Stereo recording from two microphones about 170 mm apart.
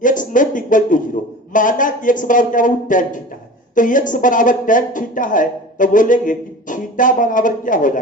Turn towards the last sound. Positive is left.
turn(degrees=50)  # may be behind; listen again after turning